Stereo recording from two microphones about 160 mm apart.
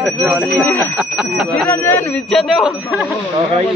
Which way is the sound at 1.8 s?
10° left (ahead or behind).